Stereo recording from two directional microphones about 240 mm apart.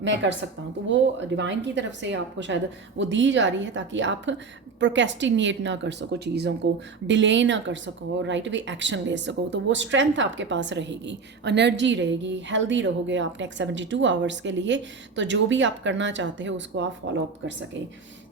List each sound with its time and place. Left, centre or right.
0.0 s speech: right